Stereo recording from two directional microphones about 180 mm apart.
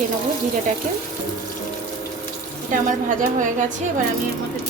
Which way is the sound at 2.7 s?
45° right (ahead or behind).